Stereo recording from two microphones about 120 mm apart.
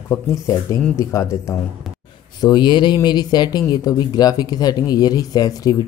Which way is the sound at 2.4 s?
40° left (ahead or behind).